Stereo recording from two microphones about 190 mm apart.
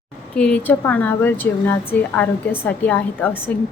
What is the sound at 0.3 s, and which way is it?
A woman's voice, 5° left (ahead or behind).